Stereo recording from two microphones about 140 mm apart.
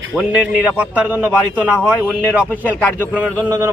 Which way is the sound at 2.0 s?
10° left (ahead or behind).